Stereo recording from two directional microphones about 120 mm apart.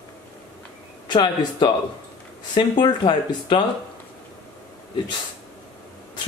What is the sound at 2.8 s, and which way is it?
Speech, 40° left (ahead or behind).